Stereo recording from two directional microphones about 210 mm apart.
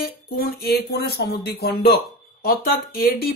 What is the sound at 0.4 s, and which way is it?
Speech, 45° left (ahead or behind).